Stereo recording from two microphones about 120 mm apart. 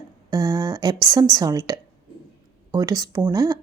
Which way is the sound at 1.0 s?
30° right (ahead or behind).